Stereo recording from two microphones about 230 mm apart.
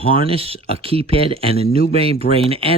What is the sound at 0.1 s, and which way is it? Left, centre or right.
Speech, right.